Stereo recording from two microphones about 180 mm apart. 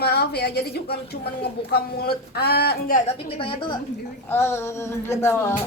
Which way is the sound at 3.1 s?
30° left (ahead or behind).